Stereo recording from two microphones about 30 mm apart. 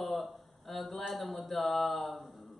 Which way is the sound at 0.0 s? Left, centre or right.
Centre.